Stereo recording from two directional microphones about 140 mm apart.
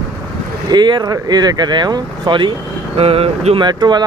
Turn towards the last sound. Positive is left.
turn(degrees=-30)  # may be behind; listen again after turning